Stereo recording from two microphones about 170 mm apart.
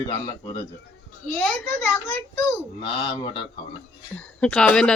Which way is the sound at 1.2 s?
10° left (ahead or behind).